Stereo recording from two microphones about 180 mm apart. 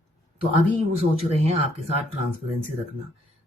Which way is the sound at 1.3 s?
35° right (ahead or behind).